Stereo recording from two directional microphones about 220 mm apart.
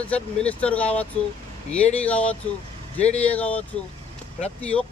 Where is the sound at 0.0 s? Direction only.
5° left (ahead or behind).